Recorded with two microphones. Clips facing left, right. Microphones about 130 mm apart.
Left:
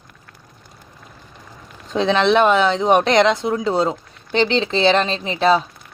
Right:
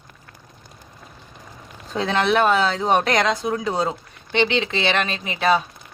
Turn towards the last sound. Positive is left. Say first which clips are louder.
# left 3 dB
turn(degrees=30)  # may be behind; listen again after turning